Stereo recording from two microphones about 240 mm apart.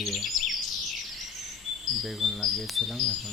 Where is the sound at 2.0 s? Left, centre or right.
Centre.